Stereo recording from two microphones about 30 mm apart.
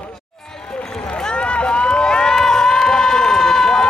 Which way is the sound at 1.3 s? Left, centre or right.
Left.